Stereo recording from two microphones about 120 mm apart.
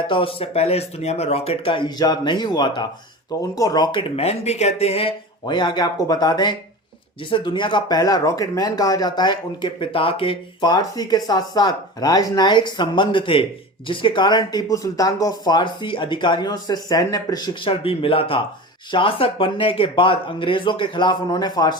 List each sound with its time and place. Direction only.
0.1 s speech: 50° left (ahead or behind); by 3.8 s 30° left (ahead or behind)
3.9 s speech: 60° left (ahead or behind)
5.5 s speech: 40° left (ahead or behind)
10.7 s speech: 35° left (ahead or behind)